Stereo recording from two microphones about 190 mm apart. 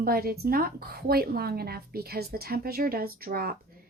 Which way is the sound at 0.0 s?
55° right (ahead or behind).